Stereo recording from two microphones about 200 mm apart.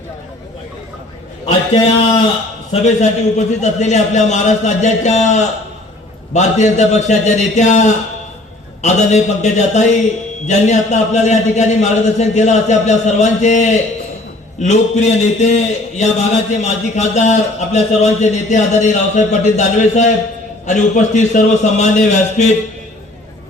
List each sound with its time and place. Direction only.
2.8 s a man's voice: 35° left (ahead or behind)